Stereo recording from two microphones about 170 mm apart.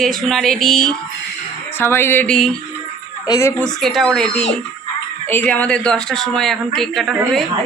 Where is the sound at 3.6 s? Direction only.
Centre (ahead or behind).